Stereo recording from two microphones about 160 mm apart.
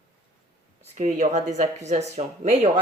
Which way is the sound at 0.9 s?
50° right (ahead or behind).